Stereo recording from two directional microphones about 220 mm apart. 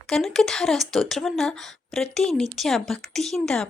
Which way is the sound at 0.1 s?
Centre (ahead or behind).